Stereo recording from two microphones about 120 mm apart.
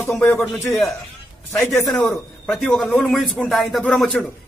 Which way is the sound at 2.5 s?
5° left (ahead or behind).